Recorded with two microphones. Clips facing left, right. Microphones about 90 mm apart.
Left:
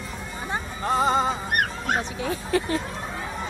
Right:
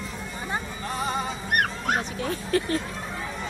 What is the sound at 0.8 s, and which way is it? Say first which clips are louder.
Music: left 10 dB; 50° left (ahead or behind).